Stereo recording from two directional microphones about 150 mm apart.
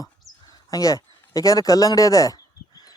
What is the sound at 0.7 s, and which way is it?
Speech, 25° left (ahead or behind).